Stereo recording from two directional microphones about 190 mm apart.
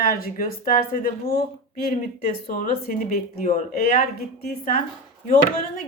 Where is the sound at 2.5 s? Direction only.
45° left (ahead or behind).